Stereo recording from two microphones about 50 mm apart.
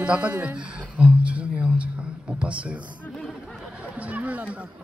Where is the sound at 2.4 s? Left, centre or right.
Right.